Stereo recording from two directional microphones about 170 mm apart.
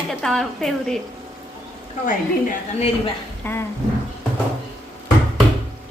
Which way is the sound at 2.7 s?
35° left (ahead or behind).